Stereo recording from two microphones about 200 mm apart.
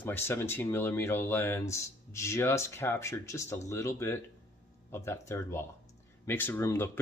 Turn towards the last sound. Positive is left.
turn(degrees=10)  # may be behind; listen again after turning